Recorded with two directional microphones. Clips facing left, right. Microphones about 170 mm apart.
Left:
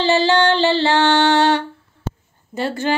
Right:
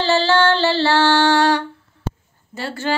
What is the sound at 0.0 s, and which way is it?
Female singing, 15° left (ahead or behind).